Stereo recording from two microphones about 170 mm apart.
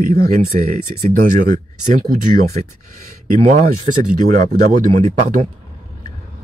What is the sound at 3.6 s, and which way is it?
Speech, 55° right (ahead or behind).